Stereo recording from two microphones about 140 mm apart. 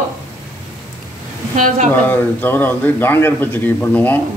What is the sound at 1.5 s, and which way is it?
Speech, 60° right (ahead or behind).